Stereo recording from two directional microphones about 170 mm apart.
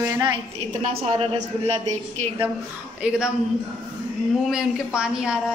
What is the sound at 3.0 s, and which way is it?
Speech, 5° right (ahead or behind).